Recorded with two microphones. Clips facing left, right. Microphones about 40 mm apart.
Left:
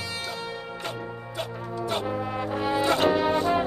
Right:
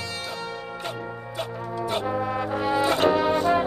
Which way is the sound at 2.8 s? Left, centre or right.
Centre.